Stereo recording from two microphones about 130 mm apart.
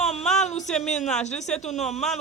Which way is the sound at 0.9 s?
5° left (ahead or behind).